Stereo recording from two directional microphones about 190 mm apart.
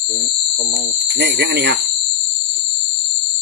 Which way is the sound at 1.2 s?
65° right (ahead or behind).